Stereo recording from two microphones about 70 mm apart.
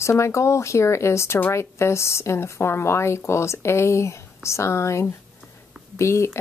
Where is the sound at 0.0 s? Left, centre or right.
Left.